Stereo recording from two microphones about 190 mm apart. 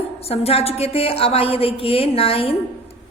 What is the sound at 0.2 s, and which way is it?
A woman's voice, 30° left (ahead or behind).